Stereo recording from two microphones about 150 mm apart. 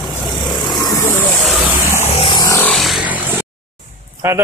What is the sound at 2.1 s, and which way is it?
Vehicle, 30° left (ahead or behind).